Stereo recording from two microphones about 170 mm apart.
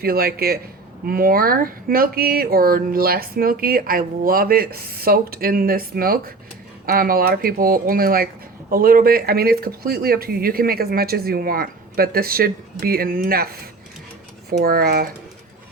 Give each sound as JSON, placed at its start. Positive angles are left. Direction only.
{"t": 0.0, "sound": "speech", "side_deg": -60}